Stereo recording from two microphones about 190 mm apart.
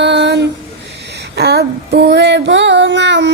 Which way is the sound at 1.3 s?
60° right (ahead or behind).